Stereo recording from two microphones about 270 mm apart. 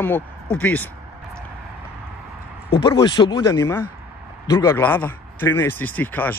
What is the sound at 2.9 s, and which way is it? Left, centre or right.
A man's voice, centre.